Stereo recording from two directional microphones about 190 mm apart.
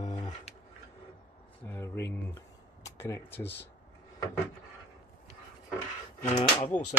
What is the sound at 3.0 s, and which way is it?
Speech, 10° left (ahead or behind).